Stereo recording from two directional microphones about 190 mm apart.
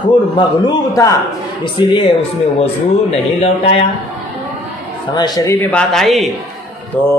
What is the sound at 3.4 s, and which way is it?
Speech, 35° left (ahead or behind).